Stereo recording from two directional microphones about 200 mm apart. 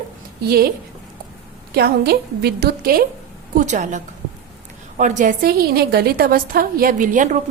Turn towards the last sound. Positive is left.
turn(degrees=-40)  # may be behind; listen again after turning